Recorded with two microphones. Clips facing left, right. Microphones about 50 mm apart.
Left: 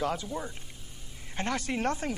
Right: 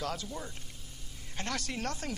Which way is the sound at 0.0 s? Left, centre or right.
Centre.